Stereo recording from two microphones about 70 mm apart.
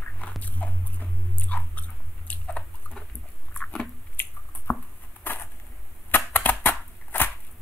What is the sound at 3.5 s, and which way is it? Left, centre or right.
Biting, centre.